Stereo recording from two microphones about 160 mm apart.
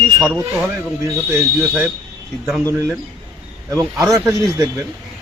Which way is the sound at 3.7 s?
20° right (ahead or behind).